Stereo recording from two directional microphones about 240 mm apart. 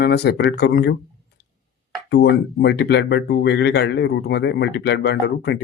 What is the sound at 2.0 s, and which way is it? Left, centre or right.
Speech, left.